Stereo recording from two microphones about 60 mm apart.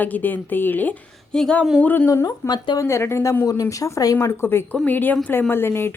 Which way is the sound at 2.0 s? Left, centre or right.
Left.